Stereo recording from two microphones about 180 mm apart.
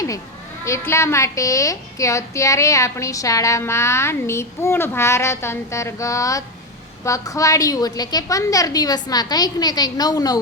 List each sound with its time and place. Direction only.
0.6 s a woman's voice: 15° left (ahead or behind)